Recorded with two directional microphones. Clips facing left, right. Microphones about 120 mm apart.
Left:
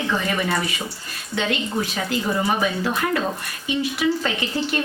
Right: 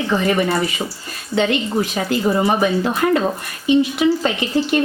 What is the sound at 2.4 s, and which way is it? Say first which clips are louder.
Speech: right 5 dB; 30° right (ahead or behind).